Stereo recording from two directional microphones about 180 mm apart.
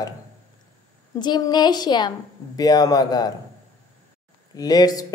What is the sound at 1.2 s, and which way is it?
Speech, 25° left (ahead or behind).